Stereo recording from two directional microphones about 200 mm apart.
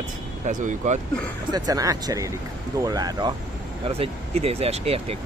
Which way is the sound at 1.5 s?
20° right (ahead or behind).